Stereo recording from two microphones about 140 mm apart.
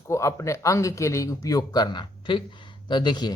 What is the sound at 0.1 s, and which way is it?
A man's voice, 20° left (ahead or behind).